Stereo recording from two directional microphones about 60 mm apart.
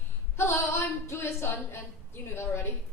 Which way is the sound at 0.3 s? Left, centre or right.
Left.